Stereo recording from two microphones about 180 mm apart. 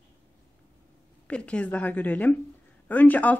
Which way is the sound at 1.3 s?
5° left (ahead or behind).